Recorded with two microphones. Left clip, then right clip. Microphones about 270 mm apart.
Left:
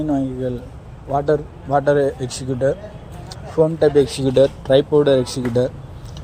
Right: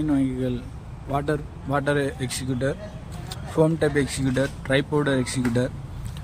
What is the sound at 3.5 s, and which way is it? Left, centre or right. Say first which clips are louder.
Speech: left 7 dB; centre.